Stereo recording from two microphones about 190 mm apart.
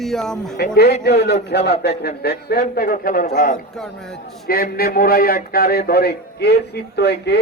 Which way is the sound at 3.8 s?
5° left (ahead or behind).